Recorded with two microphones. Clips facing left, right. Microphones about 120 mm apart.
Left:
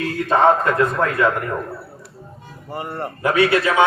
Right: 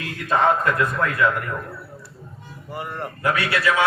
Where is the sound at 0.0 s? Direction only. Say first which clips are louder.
Left 5 dB; 35° left (ahead or behind).